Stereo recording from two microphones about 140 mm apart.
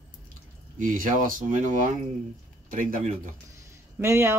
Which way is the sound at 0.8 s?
75° right (ahead or behind).